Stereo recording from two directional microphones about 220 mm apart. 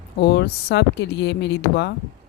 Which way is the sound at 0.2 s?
50° left (ahead or behind).